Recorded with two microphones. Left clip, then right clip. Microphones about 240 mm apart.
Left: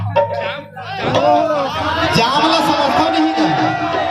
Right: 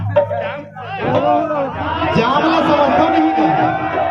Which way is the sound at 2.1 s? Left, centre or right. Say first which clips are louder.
Even; left.